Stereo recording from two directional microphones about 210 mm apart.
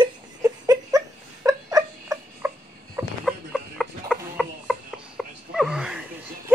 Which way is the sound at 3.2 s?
Centre (ahead or behind).